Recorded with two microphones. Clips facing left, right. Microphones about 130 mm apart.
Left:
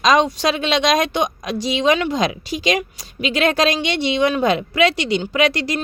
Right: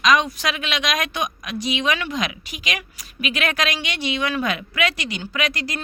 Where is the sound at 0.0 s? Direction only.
30° left (ahead or behind).